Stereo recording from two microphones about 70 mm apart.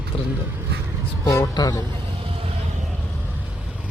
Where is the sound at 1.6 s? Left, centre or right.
Left.